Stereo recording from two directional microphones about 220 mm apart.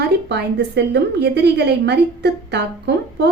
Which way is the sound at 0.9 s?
50° right (ahead or behind).